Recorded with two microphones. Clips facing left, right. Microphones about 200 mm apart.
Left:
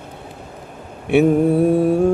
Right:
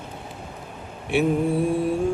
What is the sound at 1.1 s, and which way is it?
Mantra, 60° left (ahead or behind).